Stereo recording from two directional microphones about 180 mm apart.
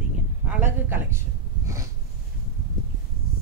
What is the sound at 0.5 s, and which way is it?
Speech, 10° right (ahead or behind).